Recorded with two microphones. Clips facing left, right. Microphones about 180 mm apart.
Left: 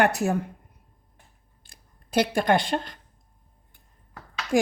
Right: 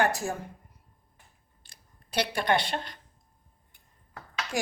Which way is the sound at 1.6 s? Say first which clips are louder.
Left 2 dB; 50° left (ahead or behind).